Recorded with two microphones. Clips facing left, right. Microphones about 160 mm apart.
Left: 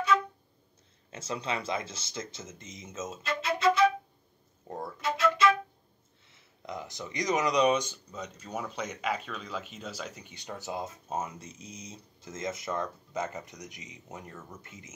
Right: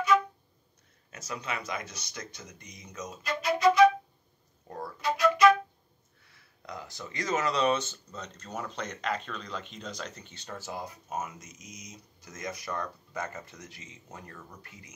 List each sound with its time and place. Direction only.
1.1 s speech: 25° left (ahead or behind)
4.6 s music: 20° left (ahead or behind)
6.2 s speech: 20° left (ahead or behind)